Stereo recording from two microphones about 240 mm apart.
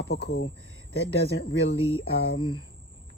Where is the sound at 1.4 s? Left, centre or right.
Left.